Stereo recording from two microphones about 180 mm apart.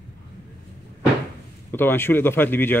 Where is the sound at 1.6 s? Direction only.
10° left (ahead or behind).